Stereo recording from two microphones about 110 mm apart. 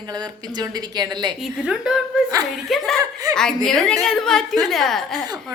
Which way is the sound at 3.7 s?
5° left (ahead or behind).